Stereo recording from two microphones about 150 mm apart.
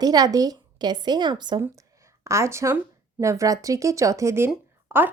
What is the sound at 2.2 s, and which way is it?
Speech, 20° right (ahead or behind).